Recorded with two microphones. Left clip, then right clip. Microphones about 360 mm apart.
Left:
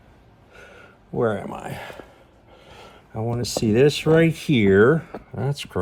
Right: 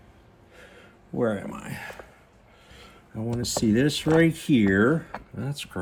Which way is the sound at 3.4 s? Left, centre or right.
Centre.